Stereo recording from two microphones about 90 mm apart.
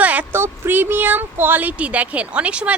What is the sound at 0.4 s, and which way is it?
Speech, 25° right (ahead or behind).